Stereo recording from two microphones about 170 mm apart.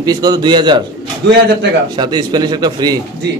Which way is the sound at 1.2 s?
85° right.